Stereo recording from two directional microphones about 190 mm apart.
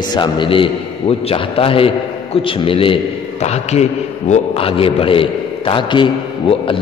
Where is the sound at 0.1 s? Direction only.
25° left (ahead or behind).